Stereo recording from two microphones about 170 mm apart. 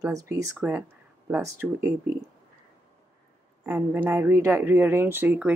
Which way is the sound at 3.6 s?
10° right (ahead or behind).